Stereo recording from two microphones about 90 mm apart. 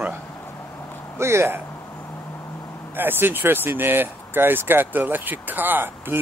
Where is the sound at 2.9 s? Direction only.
25° right (ahead or behind).